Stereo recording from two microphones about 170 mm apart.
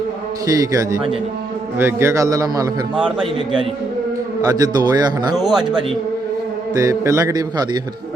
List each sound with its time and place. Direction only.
0.5 s a man's voice: 20° right (ahead or behind)
2.9 s a man's voice: 30° right (ahead or behind)
5.4 s speech: centre (ahead or behind)
6.7 s a man's voice: 20° right (ahead or behind)